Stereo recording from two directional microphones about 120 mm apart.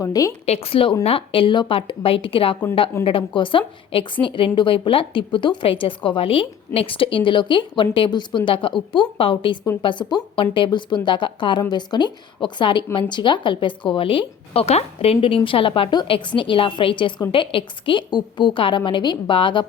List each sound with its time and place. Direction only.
0.0 s a woman's voice: 30° left (ahead or behind)
0.4 s speech: 60° left (ahead or behind)